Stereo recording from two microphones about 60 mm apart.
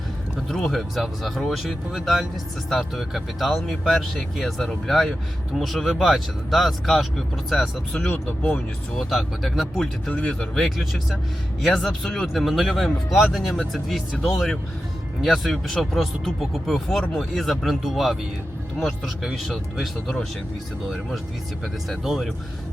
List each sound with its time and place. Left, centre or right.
0.4 s speech: centre
10.1 s a man's voice: left
10.5 s speech: centre
21.6 s speech: centre